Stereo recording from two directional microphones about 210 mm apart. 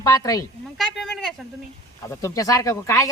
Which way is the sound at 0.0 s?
15° left (ahead or behind).